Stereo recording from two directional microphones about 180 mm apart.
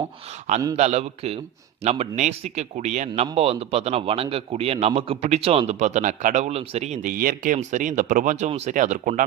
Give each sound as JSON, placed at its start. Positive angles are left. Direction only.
{"t": 0.8, "sound": "a man's voice", "side_deg": -35}